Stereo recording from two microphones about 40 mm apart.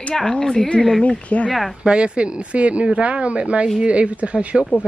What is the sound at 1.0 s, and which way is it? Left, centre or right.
Speech, left.